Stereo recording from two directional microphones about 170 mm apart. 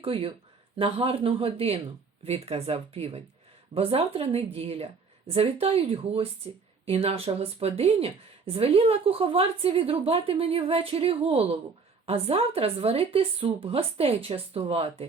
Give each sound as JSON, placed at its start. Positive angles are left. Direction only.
{"t": 0.0, "sound": "speech", "side_deg": -35}